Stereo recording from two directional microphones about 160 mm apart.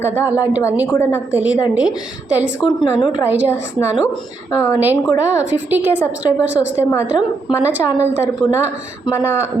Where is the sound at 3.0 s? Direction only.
30° left (ahead or behind).